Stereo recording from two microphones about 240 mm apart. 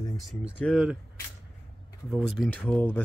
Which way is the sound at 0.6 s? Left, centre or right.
Centre.